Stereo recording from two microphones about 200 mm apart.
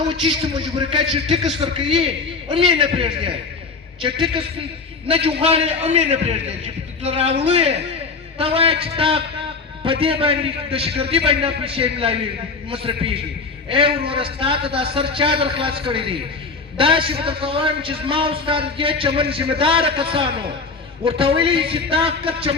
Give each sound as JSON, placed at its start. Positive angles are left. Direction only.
{"t": 0.1, "sound": "a man's voice", "side_deg": -25}
{"t": 5.0, "sound": "a man's voice", "side_deg": -30}